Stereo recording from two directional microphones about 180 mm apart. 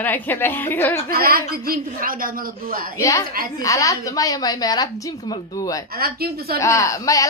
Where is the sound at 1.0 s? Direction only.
55° right (ahead or behind).